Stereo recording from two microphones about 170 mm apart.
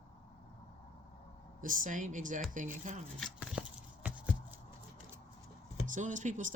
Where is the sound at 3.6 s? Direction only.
5° right (ahead or behind).